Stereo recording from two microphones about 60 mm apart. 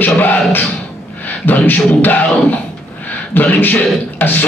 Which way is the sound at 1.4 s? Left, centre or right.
Left.